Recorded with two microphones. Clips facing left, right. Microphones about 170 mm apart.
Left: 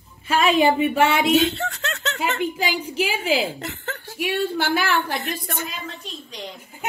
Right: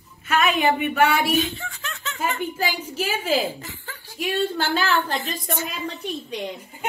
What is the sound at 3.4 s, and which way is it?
Speech, 75° left (ahead or behind).